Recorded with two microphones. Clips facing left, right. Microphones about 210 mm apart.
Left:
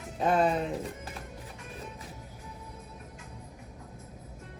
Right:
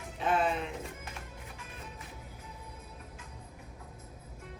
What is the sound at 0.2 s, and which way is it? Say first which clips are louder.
Music: left 4 dB; 40° left (ahead or behind).